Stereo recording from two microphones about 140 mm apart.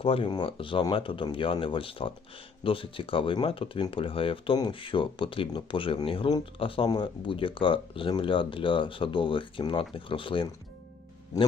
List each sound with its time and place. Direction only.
0.0 s speech: 40° left (ahead or behind)